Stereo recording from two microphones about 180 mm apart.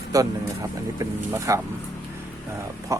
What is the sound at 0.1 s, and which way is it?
Speech, 20° right (ahead or behind).